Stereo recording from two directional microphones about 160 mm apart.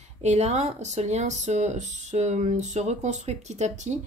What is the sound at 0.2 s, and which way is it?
Speech, 45° right (ahead or behind).